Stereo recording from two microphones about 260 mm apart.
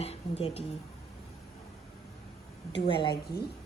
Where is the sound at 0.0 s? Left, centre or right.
Left.